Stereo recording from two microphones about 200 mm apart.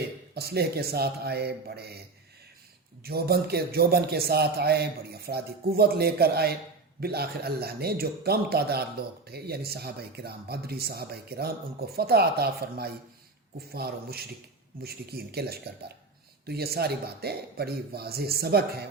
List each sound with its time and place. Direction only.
0.3 s a man's voice: 50° right (ahead or behind)
3.0 s a man's voice: 50° right (ahead or behind)